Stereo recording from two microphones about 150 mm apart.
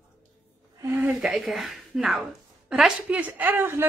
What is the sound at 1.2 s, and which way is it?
A woman's voice, 5° right (ahead or behind).